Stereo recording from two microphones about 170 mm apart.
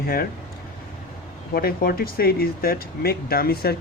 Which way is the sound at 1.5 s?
60° left (ahead or behind).